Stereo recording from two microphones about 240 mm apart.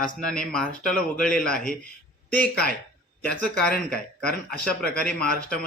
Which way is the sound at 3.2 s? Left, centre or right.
Centre.